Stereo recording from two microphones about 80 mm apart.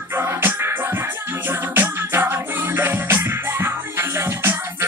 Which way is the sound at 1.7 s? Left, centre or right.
Right.